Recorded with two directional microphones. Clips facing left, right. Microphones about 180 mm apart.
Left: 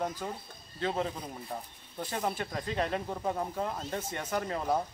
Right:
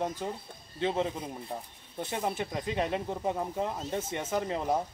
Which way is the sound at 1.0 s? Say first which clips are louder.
Right 2 dB; 10° right (ahead or behind).